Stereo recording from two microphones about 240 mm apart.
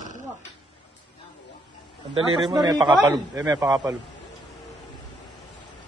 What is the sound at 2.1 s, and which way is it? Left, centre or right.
A man's voice, centre.